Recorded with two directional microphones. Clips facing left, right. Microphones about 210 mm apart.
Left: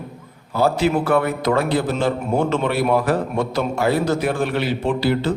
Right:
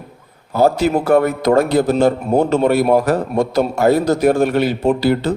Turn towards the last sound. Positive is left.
turn(degrees=-40)  # may be behind; listen again after turning